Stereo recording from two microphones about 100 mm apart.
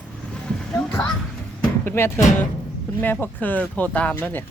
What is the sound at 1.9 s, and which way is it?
Speech, 20° left (ahead or behind).